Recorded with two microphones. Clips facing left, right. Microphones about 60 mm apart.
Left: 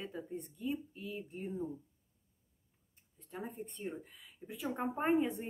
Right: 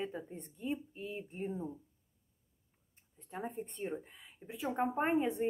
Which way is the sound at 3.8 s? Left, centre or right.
Right.